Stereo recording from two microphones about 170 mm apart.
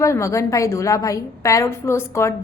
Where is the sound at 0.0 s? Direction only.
15° left (ahead or behind).